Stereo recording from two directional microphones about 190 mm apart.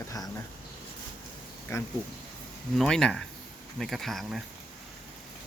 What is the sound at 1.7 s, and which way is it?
Speech, 15° left (ahead or behind).